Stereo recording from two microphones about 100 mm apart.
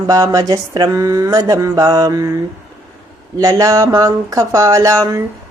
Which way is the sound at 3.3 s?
35° right (ahead or behind).